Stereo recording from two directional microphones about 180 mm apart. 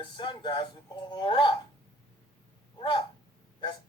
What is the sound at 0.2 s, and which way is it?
Speech, 25° left (ahead or behind).